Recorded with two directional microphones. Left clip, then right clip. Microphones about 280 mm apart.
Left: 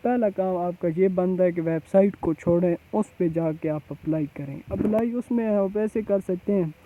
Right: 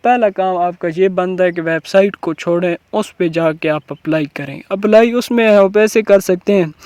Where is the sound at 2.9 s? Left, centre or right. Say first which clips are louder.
Right 9 dB; right.